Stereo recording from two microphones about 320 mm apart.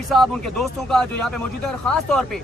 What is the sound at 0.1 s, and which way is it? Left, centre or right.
Speech, centre.